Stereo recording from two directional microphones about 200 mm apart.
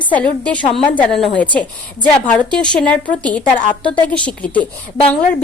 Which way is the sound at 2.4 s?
20° left (ahead or behind).